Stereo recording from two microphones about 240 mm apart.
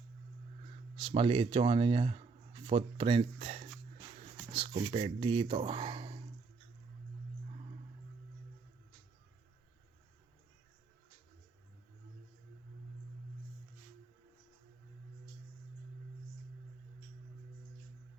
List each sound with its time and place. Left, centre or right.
0.9 s speech: centre